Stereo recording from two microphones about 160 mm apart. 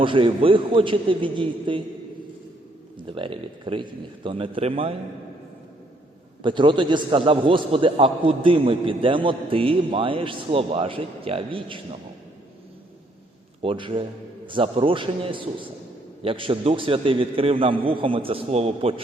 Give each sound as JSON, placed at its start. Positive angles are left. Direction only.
{"t": 0.0, "sound": "a man's voice", "side_deg": -35}
{"t": 3.1, "sound": "a man's voice", "side_deg": -35}
{"t": 6.4, "sound": "a man's voice", "side_deg": -30}
{"t": 13.6, "sound": "a man's voice", "side_deg": -35}